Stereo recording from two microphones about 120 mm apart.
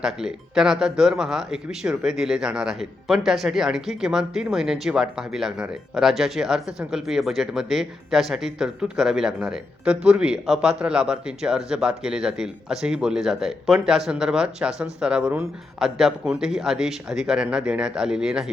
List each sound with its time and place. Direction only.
0.0 s speech: 5° right (ahead or behind)